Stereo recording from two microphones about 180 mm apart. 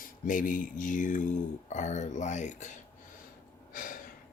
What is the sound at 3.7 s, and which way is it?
Gasp, 50° left (ahead or behind).